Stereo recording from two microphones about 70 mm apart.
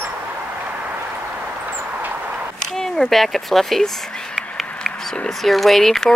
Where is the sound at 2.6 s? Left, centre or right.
Centre.